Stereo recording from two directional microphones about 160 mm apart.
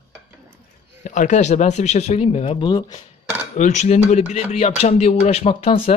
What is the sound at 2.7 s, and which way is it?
Speech, 25° left (ahead or behind).